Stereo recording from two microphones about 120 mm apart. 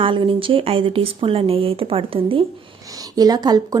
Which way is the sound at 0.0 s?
45° right (ahead or behind).